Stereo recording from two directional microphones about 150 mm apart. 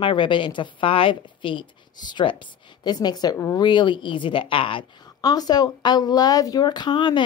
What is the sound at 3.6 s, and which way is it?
Speech, 30° left (ahead or behind).